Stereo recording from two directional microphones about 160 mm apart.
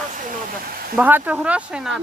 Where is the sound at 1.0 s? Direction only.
10° right (ahead or behind).